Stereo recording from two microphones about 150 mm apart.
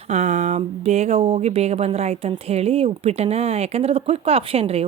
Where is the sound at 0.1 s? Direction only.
50° right (ahead or behind).